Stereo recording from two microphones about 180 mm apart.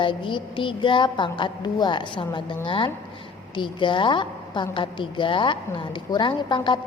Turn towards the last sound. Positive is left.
turn(degrees=25)  # may be behind; listen again after turning